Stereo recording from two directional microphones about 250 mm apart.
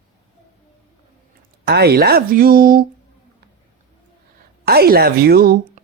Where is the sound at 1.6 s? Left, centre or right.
Right.